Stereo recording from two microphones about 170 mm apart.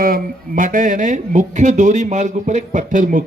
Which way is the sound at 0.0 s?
55° right (ahead or behind).